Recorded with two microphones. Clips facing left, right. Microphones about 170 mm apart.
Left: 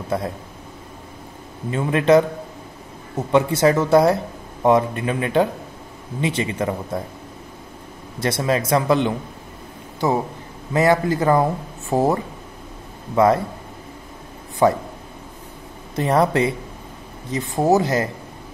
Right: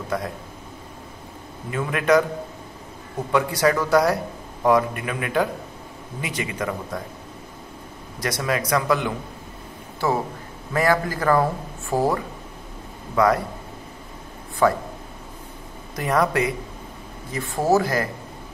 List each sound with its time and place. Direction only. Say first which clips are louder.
0.1 s speech: left 3 dB; 30° left (ahead or behind)
1.7 s speech: left 4 dB; 25° left (ahead or behind)
8.2 s speech: left 4 dB; 25° left (ahead or behind)
14.6 s speech: left 3 dB; 25° left (ahead or behind)
16.0 s speech: left 3 dB; 30° left (ahead or behind)